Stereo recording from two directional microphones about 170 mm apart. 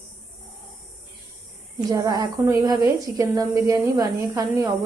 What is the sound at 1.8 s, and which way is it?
A woman's voice, 20° right (ahead or behind).